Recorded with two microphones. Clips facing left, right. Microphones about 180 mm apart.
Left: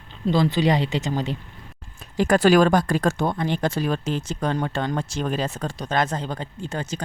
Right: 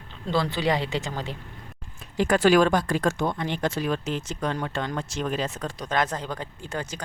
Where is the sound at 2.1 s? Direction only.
40° left (ahead or behind).